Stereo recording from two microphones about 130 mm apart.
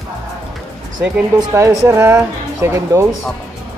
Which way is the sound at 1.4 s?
25° right (ahead or behind).